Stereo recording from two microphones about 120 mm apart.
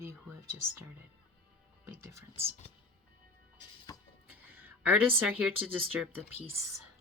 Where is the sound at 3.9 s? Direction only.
30° left (ahead or behind).